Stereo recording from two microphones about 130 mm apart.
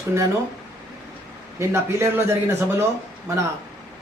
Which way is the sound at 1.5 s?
20° right (ahead or behind).